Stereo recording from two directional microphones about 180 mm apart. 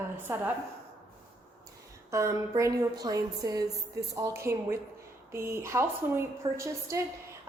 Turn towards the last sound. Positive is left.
turn(degrees=-15)  # may be behind; listen again after turning